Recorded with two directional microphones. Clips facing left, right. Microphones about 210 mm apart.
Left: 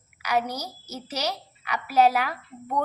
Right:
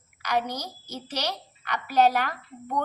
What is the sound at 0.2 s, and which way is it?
A woman's voice, 10° left (ahead or behind).